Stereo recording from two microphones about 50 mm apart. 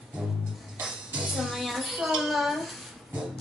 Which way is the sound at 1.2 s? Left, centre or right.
Centre.